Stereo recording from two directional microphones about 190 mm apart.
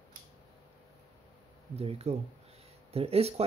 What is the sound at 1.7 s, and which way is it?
Speech, 35° right (ahead or behind).